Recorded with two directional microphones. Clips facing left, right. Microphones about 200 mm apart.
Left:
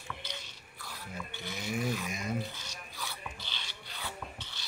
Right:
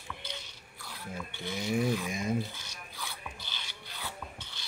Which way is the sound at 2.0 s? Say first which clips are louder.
Right 4 dB; 30° right (ahead or behind).